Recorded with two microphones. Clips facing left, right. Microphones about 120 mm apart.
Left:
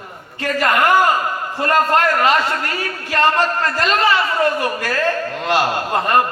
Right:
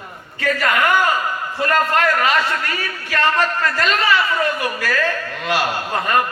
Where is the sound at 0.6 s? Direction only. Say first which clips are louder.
Left 4 dB; 35° left (ahead or behind).